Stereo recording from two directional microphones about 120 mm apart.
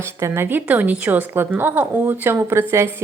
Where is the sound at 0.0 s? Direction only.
25° right (ahead or behind).